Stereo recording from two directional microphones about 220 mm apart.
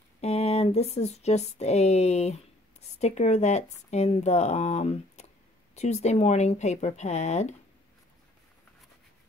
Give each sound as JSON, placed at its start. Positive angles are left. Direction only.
{"t": 0.2, "sound": "speech", "side_deg": 25}